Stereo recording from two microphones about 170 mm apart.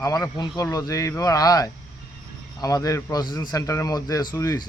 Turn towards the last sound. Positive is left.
turn(degrees=20)  # may be behind; listen again after turning